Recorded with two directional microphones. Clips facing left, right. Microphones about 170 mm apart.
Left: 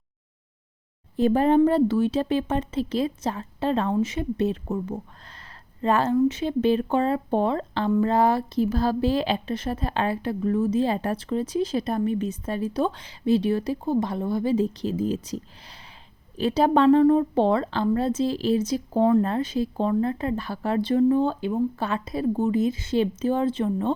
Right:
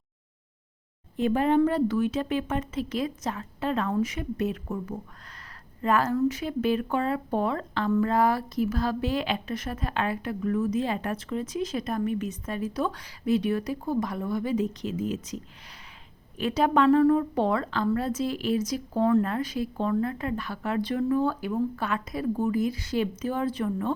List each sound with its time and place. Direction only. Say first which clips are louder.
1.1 s a woman's voice: left 4 dB; 35° left (ahead or behind)
16.4 s a woman's voice: left 3 dB; 30° left (ahead or behind)